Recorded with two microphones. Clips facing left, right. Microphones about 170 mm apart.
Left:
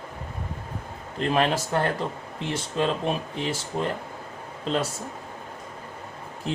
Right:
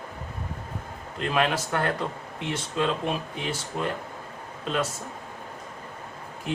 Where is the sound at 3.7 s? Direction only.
30° left (ahead or behind).